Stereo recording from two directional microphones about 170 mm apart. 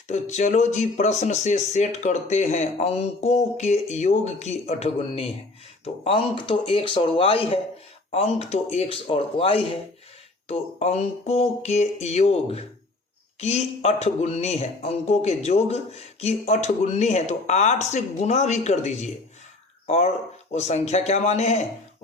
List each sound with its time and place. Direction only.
0.1 s speech: 45° left (ahead or behind)
20.5 s speech: 40° left (ahead or behind)